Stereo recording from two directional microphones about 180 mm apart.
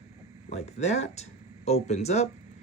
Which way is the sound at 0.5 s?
35° left (ahead or behind).